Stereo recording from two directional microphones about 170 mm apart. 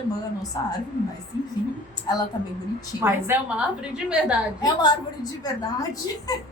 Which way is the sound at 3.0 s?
10° right (ahead or behind).